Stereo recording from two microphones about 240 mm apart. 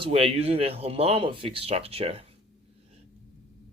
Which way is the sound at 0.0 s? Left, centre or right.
Right.